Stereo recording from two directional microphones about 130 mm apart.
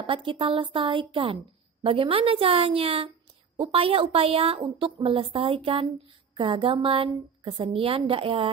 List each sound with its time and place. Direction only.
0.0 s a woman's voice: 40° right (ahead or behind)